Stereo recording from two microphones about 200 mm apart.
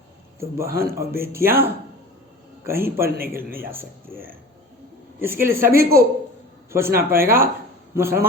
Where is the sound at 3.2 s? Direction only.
45° right (ahead or behind).